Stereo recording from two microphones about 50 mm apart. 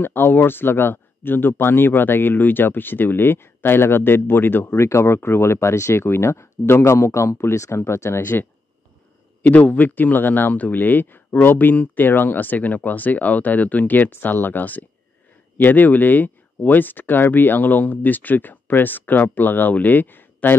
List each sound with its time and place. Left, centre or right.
0.0 s speech: left
4.7 s speech: left
7.4 s speech: left
8.2 s speech: left
9.4 s speech: left